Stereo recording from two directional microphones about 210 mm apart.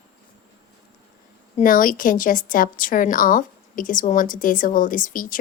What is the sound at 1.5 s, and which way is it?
A woman's voice, 40° left (ahead or behind).